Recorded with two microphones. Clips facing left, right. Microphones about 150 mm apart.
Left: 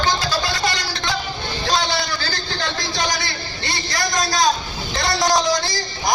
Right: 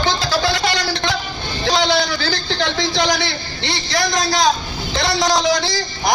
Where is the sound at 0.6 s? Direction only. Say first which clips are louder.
Right 4 dB; 70° right (ahead or behind).